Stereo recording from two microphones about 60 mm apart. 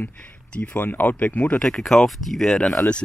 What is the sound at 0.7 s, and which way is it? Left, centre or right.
Speech, left.